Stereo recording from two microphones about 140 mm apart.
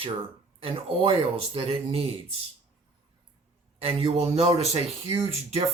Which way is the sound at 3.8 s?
45° right (ahead or behind).